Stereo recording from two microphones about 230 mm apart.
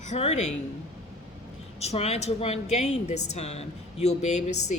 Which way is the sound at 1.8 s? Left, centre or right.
Left.